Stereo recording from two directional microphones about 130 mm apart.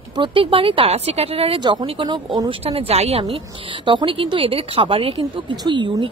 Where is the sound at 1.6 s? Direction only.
35° right (ahead or behind).